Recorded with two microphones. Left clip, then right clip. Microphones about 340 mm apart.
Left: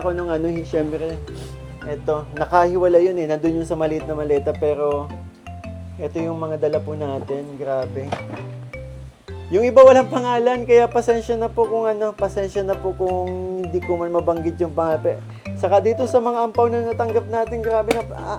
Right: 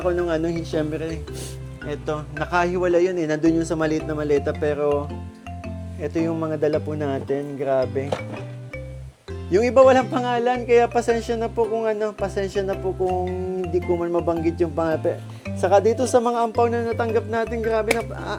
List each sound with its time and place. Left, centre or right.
0.0 s speech: right
1.9 s music: right
2.4 s speech: right
6.0 s music: right
9.5 s speech: right
13.7 s speech: right
16.6 s music: right